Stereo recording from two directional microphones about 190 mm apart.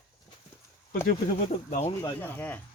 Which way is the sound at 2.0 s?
10° left (ahead or behind).